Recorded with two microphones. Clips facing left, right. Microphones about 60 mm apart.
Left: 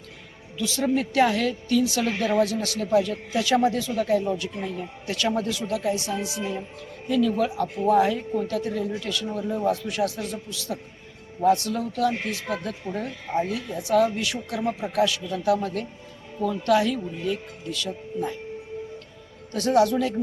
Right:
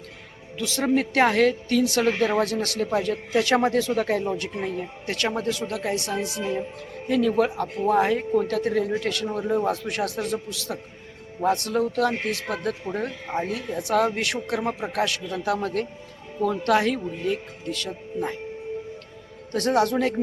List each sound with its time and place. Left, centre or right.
0.6 s speech: right
2.0 s speech: right
2.4 s speech: right
4.5 s speech: right
5.0 s speech: right
6.2 s speech: centre
7.1 s speech: right
8.4 s speech: right
10.5 s a man's voice: right
11.4 s speech: right
12.8 s a man's voice: right
14.9 s a man's voice: right
19.5 s speech: right